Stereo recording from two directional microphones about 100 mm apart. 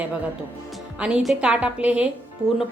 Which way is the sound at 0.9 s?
10° right (ahead or behind).